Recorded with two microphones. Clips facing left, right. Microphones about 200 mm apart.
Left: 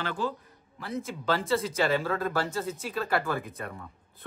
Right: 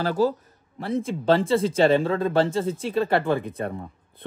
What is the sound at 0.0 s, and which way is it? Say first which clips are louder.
Speech: right 10 dB; 40° right (ahead or behind).